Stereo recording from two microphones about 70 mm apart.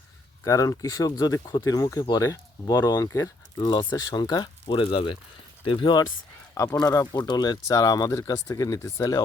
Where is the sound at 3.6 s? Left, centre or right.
Left.